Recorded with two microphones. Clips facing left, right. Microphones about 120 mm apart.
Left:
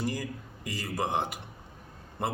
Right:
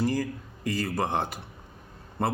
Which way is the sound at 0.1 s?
15° left (ahead or behind).